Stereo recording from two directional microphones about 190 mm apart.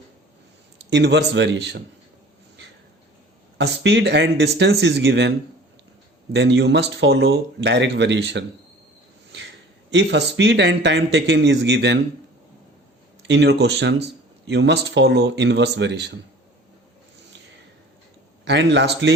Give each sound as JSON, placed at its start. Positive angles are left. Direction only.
{"t": 0.9, "sound": "speech", "side_deg": -65}
{"t": 3.6, "sound": "speech", "side_deg": -65}
{"t": 6.3, "sound": "speech", "side_deg": -65}
{"t": 9.9, "sound": "a man's voice", "side_deg": -65}
{"t": 13.2, "sound": "speech", "side_deg": -70}
{"t": 18.4, "sound": "speech", "side_deg": -65}